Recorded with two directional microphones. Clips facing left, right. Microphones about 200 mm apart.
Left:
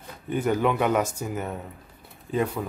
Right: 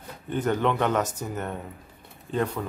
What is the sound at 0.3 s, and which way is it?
Speech, 10° left (ahead or behind).